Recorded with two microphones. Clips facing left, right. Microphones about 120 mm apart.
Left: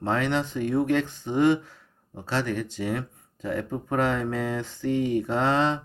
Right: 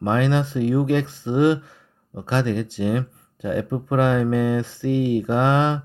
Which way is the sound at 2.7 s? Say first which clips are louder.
Right 6 dB; 15° right (ahead or behind).